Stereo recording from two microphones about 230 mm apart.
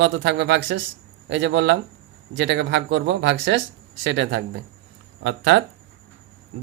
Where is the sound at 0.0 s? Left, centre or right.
Right.